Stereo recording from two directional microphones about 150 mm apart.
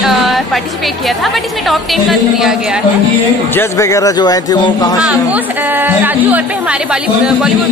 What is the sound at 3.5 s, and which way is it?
Speech, 15° left (ahead or behind).